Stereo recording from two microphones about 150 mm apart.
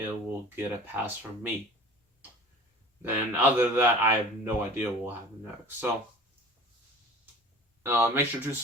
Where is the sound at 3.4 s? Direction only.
15° right (ahead or behind).